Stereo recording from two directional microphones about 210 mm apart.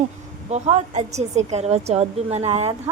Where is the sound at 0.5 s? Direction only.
30° right (ahead or behind).